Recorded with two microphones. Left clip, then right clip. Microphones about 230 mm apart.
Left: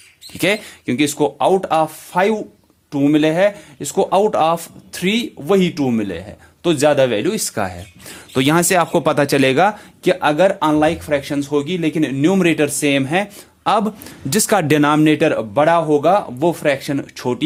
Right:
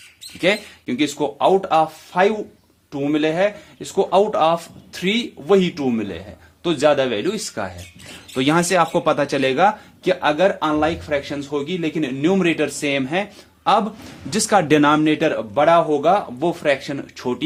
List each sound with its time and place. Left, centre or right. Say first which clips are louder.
0.3 s speech: left 1 dB; left